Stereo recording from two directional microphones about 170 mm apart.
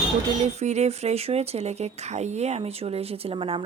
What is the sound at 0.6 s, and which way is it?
Speech, 40° right (ahead or behind).